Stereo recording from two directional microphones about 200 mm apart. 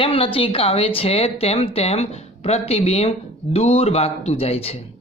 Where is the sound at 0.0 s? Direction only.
25° left (ahead or behind).